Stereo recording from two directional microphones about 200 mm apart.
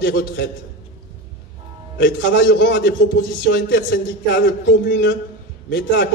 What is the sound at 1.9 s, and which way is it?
A man's voice, 65° left (ahead or behind).